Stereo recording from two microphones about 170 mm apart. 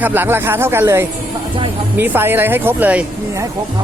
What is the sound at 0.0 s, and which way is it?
Speech, 10° right (ahead or behind).